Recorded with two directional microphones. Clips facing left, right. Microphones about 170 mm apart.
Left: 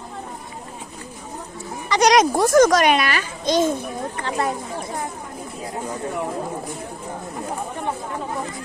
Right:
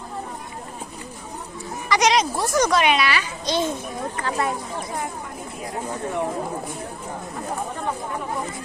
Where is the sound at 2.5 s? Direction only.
45° left (ahead or behind).